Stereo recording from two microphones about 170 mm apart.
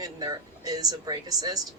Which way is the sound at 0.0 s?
20° right (ahead or behind).